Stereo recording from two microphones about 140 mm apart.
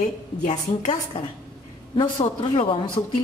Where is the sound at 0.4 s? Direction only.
55° left (ahead or behind).